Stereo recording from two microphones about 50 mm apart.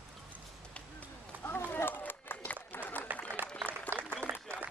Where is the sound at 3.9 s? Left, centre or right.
Right.